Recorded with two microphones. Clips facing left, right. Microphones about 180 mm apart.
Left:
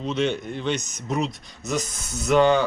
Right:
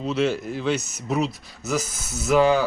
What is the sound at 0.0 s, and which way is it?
Speech, 5° right (ahead or behind).